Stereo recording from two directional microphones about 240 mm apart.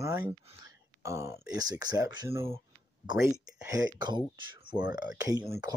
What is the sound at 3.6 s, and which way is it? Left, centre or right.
Speech, centre.